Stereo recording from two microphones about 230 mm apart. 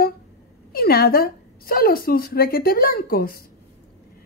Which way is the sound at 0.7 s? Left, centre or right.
Left.